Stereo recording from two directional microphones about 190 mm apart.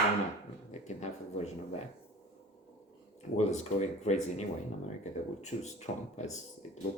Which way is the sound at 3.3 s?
35° left (ahead or behind).